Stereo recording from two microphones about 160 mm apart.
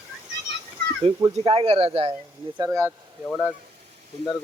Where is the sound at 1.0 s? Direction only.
25° right (ahead or behind).